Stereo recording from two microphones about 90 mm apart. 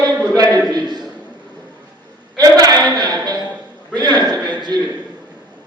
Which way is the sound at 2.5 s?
45° right (ahead or behind).